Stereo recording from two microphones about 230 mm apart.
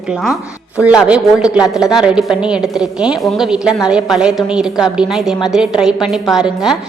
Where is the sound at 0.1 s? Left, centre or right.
Centre.